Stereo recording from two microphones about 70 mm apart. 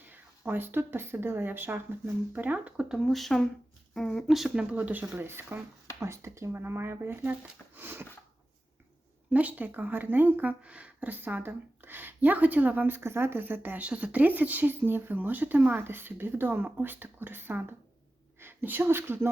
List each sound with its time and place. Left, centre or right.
0.1 s speech: right
2.9 s speech: centre; by 8.0 s right
9.3 s a woman's voice: right